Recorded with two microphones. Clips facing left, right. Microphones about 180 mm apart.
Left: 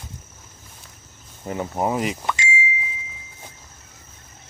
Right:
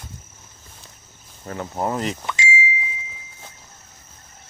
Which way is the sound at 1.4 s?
15° left (ahead or behind).